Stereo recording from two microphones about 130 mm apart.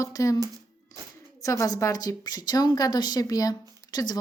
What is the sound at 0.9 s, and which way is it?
Music, 25° left (ahead or behind).